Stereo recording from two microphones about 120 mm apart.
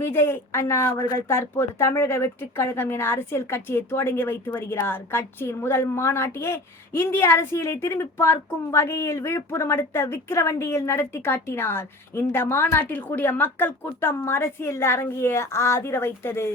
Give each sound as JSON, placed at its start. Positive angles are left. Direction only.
{"t": 0.0, "sound": "speech", "side_deg": 20}